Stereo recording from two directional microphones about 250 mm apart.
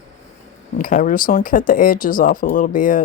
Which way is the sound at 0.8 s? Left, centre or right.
Left.